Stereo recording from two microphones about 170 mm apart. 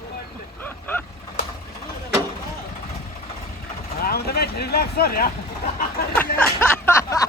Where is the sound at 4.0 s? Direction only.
65° left (ahead or behind).